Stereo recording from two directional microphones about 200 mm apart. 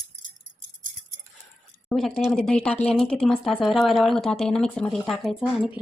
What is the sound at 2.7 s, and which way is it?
Speech, 35° left (ahead or behind).